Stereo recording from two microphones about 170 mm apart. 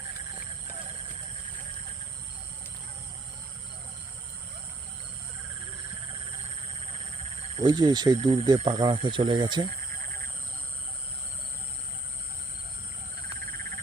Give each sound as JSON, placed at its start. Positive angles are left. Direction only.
{"t": 7.5, "sound": "speech", "side_deg": -25}